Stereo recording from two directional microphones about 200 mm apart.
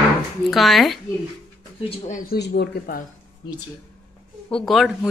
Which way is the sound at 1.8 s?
30° left (ahead or behind).